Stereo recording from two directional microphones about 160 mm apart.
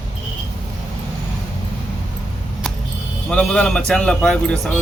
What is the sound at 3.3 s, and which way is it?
Speech, 5° left (ahead or behind).